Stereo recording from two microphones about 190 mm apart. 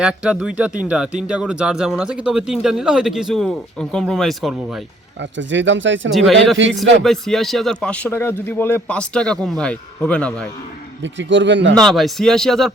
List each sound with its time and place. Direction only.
0.0 s speech: 5° right (ahead or behind)
5.2 s speech: 75° right (ahead or behind)
6.1 s speech: centre (ahead or behind)
11.0 s speech: 75° right (ahead or behind)
11.7 s speech: centre (ahead or behind)